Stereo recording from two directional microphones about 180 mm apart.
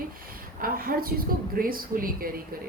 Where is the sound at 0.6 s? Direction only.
55° right (ahead or behind).